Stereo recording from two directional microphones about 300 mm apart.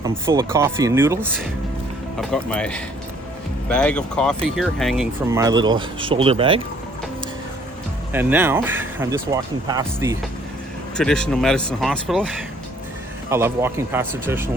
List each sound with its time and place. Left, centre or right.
0.0 s speech: centre
8.1 s speech: centre
10.9 s speech: centre
13.3 s speech: centre